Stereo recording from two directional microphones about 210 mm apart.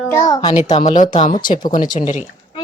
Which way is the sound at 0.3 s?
20° left (ahead or behind).